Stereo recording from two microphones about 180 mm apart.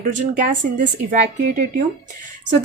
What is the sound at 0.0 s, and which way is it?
Speech, 45° right (ahead or behind).